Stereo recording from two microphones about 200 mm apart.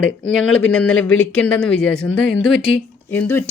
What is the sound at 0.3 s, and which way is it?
Speech, 5° left (ahead or behind).